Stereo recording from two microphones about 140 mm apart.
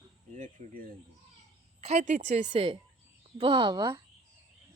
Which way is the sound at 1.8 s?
60° right (ahead or behind).